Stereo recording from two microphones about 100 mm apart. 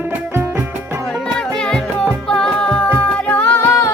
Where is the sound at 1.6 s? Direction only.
5° left (ahead or behind).